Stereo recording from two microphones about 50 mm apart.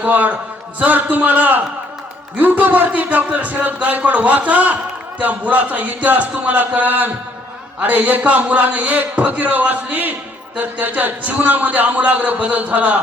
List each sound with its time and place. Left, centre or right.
0.0 s a man's voice: right